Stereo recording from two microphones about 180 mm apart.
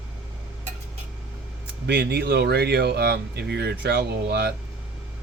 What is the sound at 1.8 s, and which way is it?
Speech, 65° right (ahead or behind).